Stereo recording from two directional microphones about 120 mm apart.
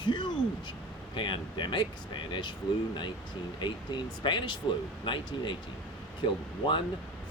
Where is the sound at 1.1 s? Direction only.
40° left (ahead or behind).